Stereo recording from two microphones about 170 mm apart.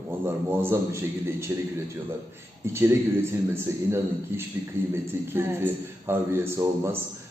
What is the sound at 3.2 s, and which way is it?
A man's voice, 15° right (ahead or behind).